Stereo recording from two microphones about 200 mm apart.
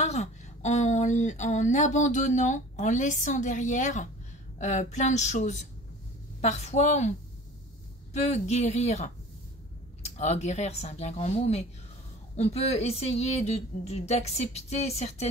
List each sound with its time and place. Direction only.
0.0 s speech: 35° left (ahead or behind)
10.1 s speech: 35° left (ahead or behind)